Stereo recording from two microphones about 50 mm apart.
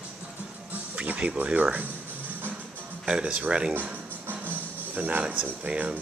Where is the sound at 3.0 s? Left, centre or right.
Centre.